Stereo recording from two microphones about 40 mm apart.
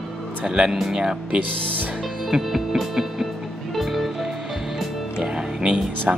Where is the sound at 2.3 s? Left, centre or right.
Centre.